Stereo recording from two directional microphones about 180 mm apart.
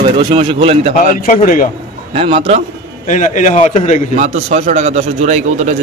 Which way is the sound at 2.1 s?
30° right (ahead or behind).